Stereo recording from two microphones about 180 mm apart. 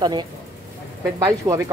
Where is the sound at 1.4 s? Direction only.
15° right (ahead or behind).